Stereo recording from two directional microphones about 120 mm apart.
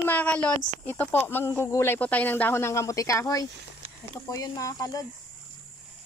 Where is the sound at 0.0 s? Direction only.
15° left (ahead or behind).